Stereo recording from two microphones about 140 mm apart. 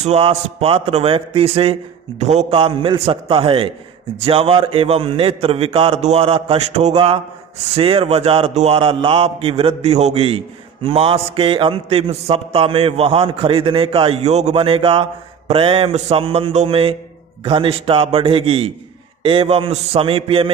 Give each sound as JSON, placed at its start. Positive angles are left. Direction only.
{"t": 0.0, "sound": "a man's voice", "side_deg": -50}
{"t": 2.5, "sound": "a man's voice", "side_deg": -40}